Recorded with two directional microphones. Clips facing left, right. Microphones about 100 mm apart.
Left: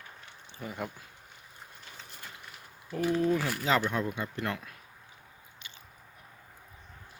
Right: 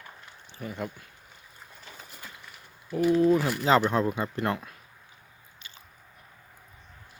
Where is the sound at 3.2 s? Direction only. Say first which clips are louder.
Right 6 dB; 20° right (ahead or behind).